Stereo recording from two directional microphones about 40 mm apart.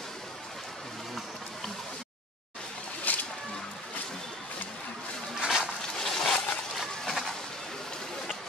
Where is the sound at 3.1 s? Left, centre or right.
Left.